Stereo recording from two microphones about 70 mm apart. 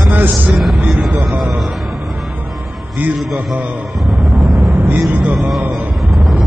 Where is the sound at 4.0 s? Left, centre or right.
Centre.